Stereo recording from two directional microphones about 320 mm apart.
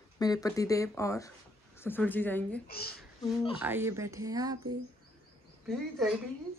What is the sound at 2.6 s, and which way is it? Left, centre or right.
Speech, left.